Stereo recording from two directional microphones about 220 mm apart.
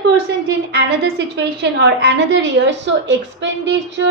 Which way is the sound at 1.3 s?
50° right (ahead or behind).